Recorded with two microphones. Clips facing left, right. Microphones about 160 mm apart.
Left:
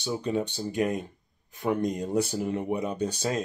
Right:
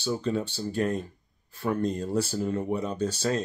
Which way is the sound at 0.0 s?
15° left (ahead or behind).